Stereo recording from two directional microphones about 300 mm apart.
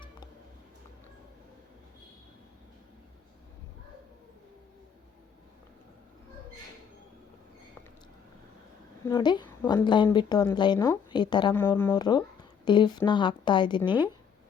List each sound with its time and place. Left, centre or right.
9.0 s a woman's voice: centre